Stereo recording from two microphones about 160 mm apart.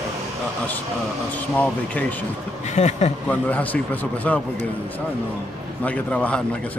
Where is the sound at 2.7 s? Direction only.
45° left (ahead or behind).